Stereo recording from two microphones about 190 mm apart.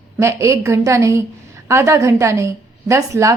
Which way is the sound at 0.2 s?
15° right (ahead or behind).